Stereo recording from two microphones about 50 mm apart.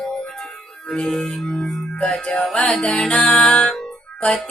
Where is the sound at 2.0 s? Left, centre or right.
Centre.